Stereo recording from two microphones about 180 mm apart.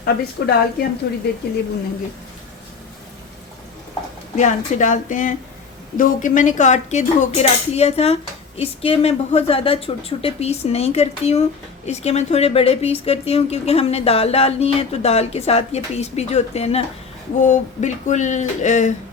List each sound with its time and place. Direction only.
0.0 s speech: 60° left (ahead or behind)
4.4 s a woman's voice: 45° left (ahead or behind)